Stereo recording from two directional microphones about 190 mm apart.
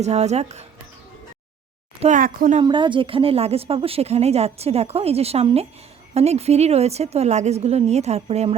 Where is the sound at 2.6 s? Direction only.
25° right (ahead or behind).